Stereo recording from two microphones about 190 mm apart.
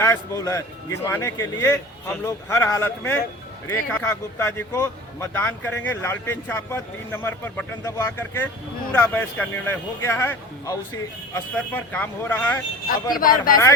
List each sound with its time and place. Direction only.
0.0 s a man's voice: 15° left (ahead or behind)
13.1 s speech: 50° left (ahead or behind)